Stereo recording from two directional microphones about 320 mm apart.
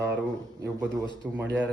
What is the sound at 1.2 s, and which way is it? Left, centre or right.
Speech, centre.